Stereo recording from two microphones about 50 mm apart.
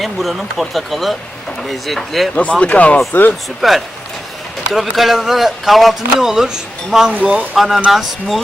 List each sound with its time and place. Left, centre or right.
0.0 s speech: centre
2.3 s speech: left
3.1 s speech: left
3.6 s speech: centre